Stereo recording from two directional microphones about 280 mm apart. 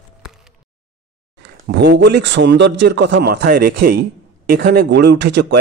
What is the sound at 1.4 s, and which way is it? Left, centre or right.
A man's voice, right.